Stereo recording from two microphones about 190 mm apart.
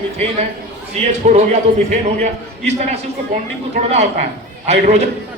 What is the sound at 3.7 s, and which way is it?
A man's voice, 35° right (ahead or behind).